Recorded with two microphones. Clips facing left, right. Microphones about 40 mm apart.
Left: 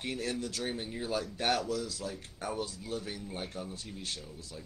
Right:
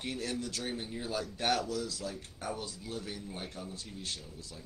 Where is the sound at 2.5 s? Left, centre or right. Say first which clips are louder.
Left 4 dB; left.